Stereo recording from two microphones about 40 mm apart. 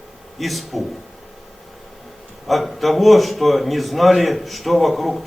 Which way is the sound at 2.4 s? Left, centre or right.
Centre.